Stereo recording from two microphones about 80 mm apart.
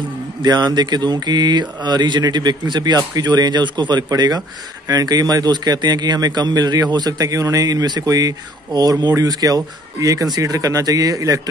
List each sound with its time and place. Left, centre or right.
0.4 s a man's voice: right